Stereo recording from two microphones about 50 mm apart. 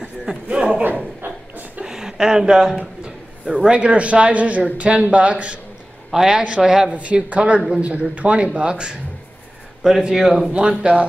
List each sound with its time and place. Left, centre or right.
0.5 s speech: centre
0.9 s a sound: right
1.9 s a sound: centre
3.4 s speech: centre
6.1 s a man's voice: centre
6.9 s speech: right
9.8 s a man's voice: centre
10.5 s speech: centre